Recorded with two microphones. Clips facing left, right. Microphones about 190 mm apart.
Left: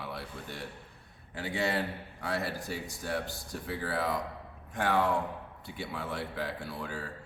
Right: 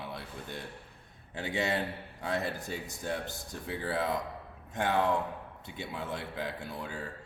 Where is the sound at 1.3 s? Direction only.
20° right (ahead or behind).